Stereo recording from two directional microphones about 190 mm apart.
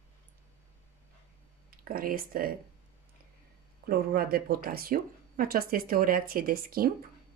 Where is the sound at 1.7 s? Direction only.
50° right (ahead or behind).